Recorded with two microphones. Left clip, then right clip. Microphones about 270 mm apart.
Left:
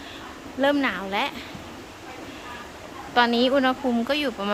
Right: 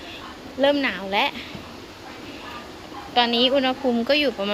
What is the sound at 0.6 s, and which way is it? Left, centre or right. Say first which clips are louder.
Speech: right 2 dB; centre.